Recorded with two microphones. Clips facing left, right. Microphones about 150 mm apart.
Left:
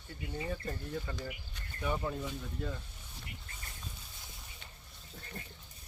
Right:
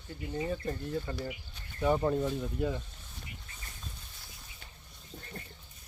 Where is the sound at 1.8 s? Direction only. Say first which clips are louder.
Right 8 dB; 35° right (ahead or behind).